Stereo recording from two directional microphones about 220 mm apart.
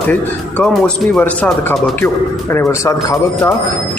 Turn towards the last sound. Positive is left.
turn(degrees=15)  # may be behind; listen again after turning